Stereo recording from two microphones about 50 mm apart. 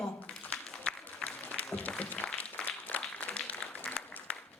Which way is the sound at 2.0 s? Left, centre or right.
Left.